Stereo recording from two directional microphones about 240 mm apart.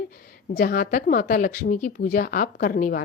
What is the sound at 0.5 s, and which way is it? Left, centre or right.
Speech, left.